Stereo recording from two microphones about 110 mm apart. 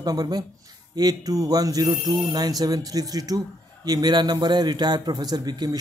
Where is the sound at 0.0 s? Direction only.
35° right (ahead or behind).